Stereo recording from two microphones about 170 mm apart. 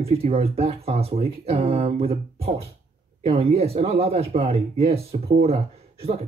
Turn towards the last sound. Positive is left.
turn(degrees=-35)  # may be behind; listen again after turning